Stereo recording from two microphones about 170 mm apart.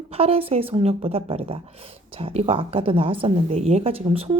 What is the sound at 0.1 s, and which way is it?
Speech, 35° right (ahead or behind).